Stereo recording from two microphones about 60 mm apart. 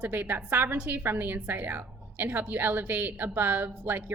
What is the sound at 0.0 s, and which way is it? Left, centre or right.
A woman's voice, right.